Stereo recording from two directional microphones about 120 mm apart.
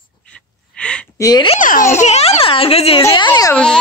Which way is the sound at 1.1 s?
30° left (ahead or behind).